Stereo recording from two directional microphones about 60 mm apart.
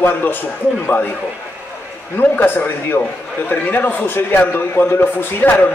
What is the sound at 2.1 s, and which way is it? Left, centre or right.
A man's voice, left.